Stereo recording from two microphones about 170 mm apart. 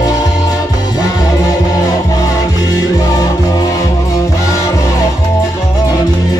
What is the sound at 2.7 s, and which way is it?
Music, 20° left (ahead or behind).